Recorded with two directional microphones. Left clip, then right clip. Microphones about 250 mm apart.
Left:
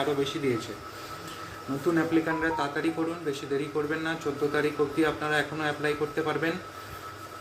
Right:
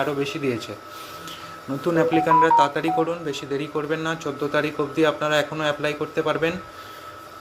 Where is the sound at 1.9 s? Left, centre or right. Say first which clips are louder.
Right 12 dB; right.